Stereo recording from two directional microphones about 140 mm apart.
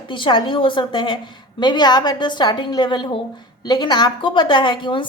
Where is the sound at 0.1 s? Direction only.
35° left (ahead or behind).